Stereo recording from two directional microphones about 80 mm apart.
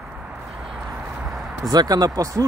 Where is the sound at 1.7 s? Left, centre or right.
Right.